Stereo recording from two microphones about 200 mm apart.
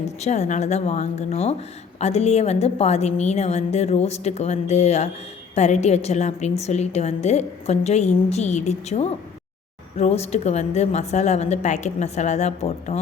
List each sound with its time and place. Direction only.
0.2 s a woman's voice: 35° left (ahead or behind)